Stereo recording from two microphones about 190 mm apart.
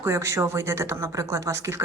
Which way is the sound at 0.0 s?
15° right (ahead or behind).